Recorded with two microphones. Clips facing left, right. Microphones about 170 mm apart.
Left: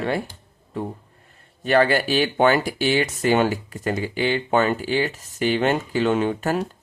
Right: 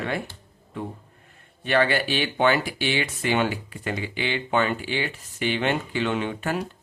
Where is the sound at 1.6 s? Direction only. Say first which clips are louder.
Left 4 dB; 40° left (ahead or behind).